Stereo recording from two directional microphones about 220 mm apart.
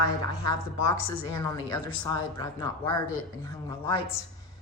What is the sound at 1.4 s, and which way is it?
Speech, 15° left (ahead or behind).